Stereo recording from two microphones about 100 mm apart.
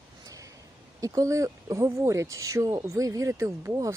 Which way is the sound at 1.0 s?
35° right (ahead or behind).